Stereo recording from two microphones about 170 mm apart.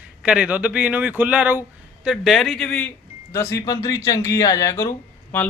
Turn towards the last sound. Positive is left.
turn(degrees=15)  # may be behind; listen again after turning